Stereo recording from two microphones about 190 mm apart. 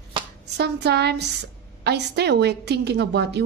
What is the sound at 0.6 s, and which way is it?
A woman's voice, 60° right (ahead or behind).